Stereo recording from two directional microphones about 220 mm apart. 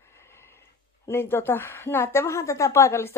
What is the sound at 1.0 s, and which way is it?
Speech, 10° left (ahead or behind).